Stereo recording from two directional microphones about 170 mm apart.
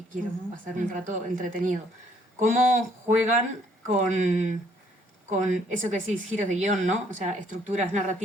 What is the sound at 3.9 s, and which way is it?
Speech, 45° right (ahead or behind).